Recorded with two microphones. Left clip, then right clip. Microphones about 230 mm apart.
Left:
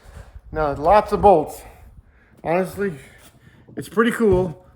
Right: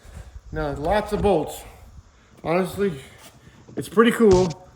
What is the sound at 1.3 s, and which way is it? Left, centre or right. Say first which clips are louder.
Speech: left 5 dB; centre.